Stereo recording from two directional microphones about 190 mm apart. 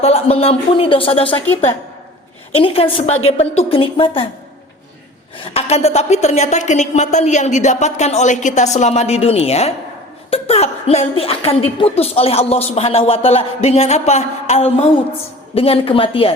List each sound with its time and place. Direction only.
0.0 s a woman's voice: 30° left (ahead or behind)
1.3 s a woman's voice: 10° left (ahead or behind)
2.5 s a woman's voice: 30° left (ahead or behind)
5.5 s a woman's voice: 35° left (ahead or behind)